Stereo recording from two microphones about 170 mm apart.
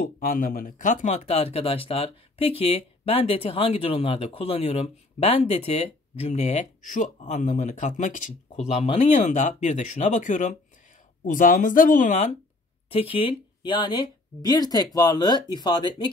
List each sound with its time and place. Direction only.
0.0 s speech: 55° left (ahead or behind)
12.9 s speech: 35° left (ahead or behind)